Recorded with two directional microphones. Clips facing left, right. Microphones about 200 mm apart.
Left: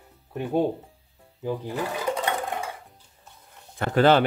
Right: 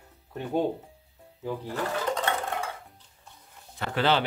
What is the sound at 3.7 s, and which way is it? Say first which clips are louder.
Speech: left 7 dB; 50° left (ahead or behind).